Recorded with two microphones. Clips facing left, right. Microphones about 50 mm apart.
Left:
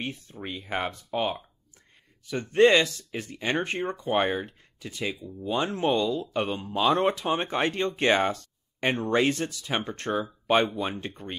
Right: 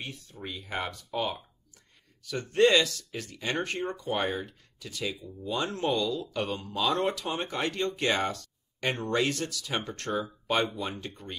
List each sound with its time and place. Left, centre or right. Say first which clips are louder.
0.0 s speech: left 5 dB; left